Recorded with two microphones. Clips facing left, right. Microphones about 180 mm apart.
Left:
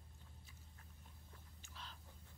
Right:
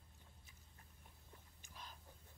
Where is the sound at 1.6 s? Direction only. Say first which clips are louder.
Even; 15° right (ahead or behind).